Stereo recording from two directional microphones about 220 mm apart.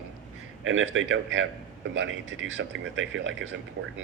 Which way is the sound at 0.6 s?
65° right (ahead or behind).